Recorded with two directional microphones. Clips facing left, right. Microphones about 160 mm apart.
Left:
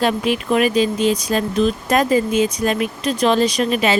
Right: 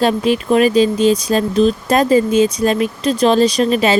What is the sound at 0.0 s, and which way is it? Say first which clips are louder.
Speech: right 4 dB; 35° right (ahead or behind).